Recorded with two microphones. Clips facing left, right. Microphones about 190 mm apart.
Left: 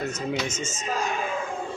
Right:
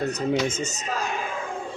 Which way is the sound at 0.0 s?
35° right (ahead or behind).